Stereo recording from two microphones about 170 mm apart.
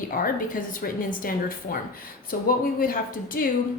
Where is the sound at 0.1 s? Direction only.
55° left (ahead or behind).